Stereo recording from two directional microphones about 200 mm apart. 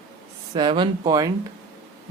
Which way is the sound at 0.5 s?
25° right (ahead or behind).